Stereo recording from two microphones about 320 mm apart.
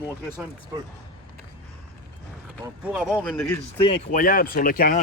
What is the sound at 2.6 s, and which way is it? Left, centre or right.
Speech, centre.